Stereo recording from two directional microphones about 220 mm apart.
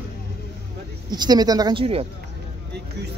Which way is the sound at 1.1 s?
20° right (ahead or behind).